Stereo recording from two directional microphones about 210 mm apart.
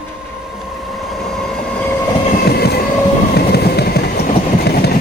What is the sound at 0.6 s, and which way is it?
Train, centre (ahead or behind).